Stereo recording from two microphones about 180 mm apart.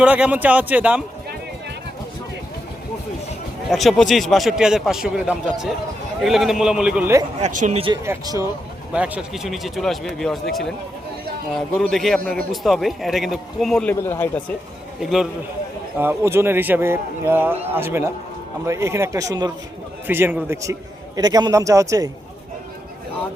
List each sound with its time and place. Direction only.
0.0 s a man's voice: 5° right (ahead or behind)
3.7 s a man's voice: centre (ahead or behind)
7.4 s speech: 40° right (ahead or behind)
8.0 s a man's voice: 15° right (ahead or behind)
8.9 s a man's voice: 5° right (ahead or behind); by 14.4 s 10° left (ahead or behind)
15.0 s a man's voice: centre (ahead or behind)
16.0 s a man's voice: 15° right (ahead or behind)